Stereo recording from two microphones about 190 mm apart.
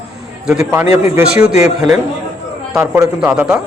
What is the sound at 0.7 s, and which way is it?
Speech, 15° right (ahead or behind).